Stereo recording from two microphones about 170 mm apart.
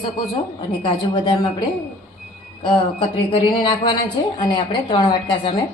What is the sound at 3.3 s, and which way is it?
A woman's voice, 25° left (ahead or behind).